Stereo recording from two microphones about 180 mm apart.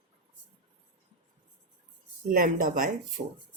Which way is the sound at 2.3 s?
50° right (ahead or behind).